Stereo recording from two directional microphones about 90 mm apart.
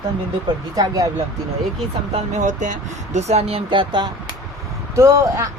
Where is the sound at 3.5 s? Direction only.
60° right (ahead or behind).